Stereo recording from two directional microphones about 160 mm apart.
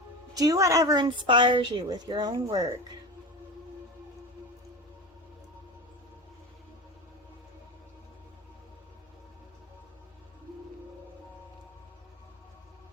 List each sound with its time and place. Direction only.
0.3 s a woman's voice: 20° right (ahead or behind)